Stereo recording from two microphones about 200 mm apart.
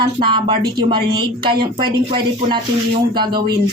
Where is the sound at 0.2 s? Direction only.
25° right (ahead or behind).